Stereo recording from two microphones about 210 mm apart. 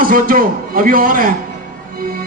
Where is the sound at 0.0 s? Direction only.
40° right (ahead or behind).